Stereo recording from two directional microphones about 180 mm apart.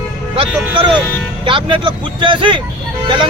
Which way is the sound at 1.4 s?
30° right (ahead or behind).